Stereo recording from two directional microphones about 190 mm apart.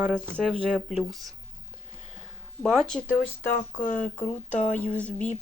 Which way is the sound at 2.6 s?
5° left (ahead or behind).